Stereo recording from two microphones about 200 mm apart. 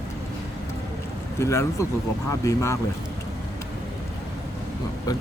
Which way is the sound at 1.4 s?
15° left (ahead or behind).